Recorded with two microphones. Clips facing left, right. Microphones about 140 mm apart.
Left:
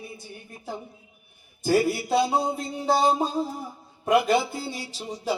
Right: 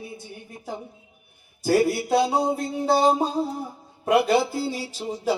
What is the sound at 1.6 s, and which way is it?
Speech, centre (ahead or behind).